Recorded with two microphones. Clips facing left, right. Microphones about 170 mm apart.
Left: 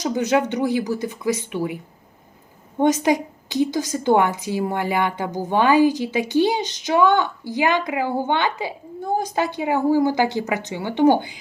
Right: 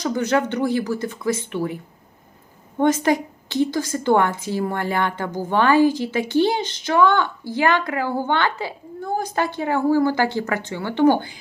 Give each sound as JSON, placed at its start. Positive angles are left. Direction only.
{"t": 0.0, "sound": "a woman's voice", "side_deg": 15}
{"t": 3.0, "sound": "a woman's voice", "side_deg": 15}